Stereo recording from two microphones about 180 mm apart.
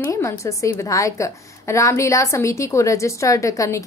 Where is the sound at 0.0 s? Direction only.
15° left (ahead or behind).